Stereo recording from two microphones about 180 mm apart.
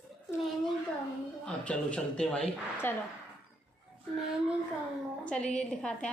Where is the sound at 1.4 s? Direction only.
5° left (ahead or behind).